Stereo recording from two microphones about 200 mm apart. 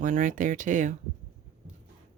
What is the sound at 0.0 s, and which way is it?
Speech, 40° right (ahead or behind).